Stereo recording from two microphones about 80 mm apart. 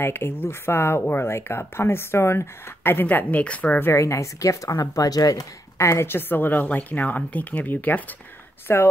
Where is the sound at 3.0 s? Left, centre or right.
Centre; by 5.4 s left.